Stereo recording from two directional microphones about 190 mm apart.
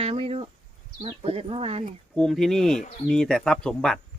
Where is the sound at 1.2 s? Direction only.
30° right (ahead or behind).